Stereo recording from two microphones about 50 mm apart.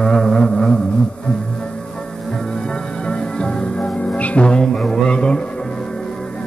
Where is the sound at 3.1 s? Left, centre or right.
Centre.